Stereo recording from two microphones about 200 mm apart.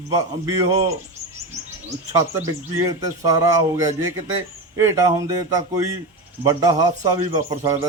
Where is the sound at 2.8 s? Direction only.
20° right (ahead or behind).